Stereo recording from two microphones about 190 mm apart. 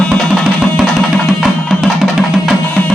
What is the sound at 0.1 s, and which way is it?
Music, 5° right (ahead or behind).